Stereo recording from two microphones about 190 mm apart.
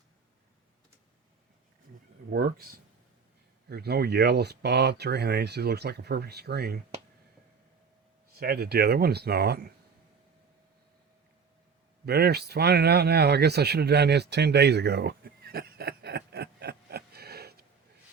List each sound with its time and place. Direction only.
2.3 s speech: 55° right (ahead or behind)
8.3 s speech: 55° right (ahead or behind)
12.0 s speech: 60° right (ahead or behind)